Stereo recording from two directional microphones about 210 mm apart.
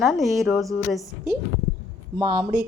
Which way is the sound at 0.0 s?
Centre (ahead or behind).